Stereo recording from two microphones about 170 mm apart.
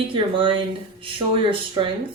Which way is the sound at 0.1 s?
30° right (ahead or behind).